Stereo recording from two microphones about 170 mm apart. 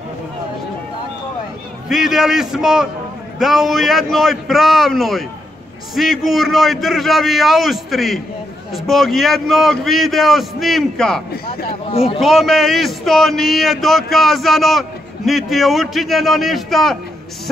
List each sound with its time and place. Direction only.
1.9 s a man's voice: centre (ahead or behind)
11.9 s a man's voice: 35° left (ahead or behind)
12.2 s a man's voice: centre (ahead or behind)